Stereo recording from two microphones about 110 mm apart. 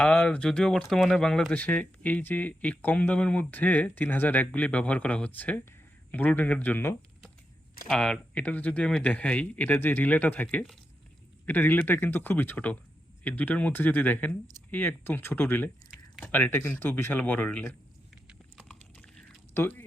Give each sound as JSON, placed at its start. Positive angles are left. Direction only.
{"t": 0.0, "sound": "speech", "side_deg": 10}
{"t": 7.9, "sound": "speech", "side_deg": 10}
{"t": 15.9, "sound": "a sound", "side_deg": -5}
{"t": 16.3, "sound": "speech", "side_deg": 20}
{"t": 19.5, "sound": "speech", "side_deg": 20}